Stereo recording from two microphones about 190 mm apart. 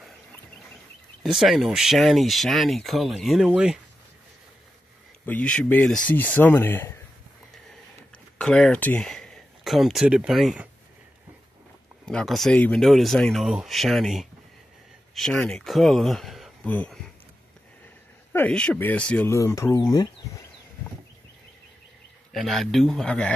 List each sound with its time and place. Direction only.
1.2 s speech: centre (ahead or behind)
5.2 s speech: 5° left (ahead or behind)
8.4 s speech: 5° left (ahead or behind)
12.1 s speech: centre (ahead or behind)
18.3 s speech: 10° left (ahead or behind)
22.3 s speech: centre (ahead or behind)